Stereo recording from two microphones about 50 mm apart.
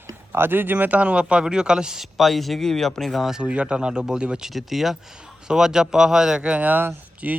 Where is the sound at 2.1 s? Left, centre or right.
Centre.